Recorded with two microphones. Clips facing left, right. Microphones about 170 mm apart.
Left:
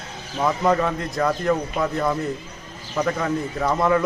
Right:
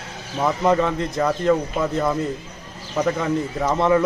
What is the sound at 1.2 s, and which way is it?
Speech, 20° right (ahead or behind).